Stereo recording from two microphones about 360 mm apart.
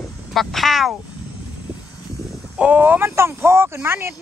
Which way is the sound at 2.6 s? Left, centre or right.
Centre.